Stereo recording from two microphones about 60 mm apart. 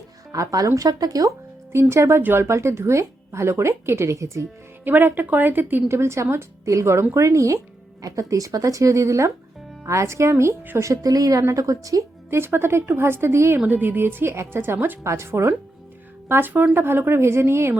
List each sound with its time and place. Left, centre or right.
0.3 s speech: right
0.8 s speech: right
1.7 s speech: right
4.8 s a woman's voice: right
5.9 s speech: right
11.0 s speech: right
11.5 s speech: right
12.3 s speech: right
13.7 s a woman's voice: right
15.0 s speech: right
16.3 s a woman's voice: right